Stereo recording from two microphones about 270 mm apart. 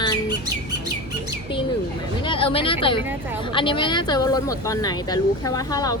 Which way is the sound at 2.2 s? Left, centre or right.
Centre.